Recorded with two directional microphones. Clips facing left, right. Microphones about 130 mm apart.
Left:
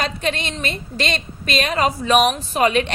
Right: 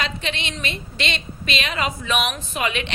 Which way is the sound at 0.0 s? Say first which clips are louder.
Left 5 dB; 45° left (ahead or behind).